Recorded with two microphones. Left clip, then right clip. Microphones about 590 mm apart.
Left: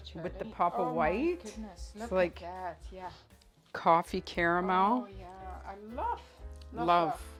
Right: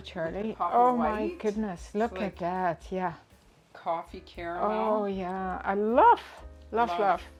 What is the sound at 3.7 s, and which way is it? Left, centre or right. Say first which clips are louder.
Speech: left 6 dB; left.